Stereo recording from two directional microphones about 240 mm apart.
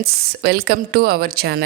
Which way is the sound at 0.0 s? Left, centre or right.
Right.